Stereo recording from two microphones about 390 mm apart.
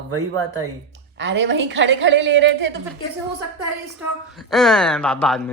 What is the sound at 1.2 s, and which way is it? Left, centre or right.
A woman's voice, right.